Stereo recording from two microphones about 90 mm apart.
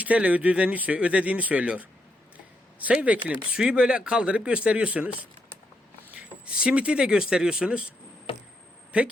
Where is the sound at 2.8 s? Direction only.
15° right (ahead or behind).